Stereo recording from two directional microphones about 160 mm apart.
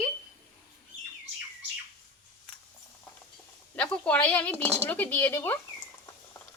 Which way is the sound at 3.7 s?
10° left (ahead or behind).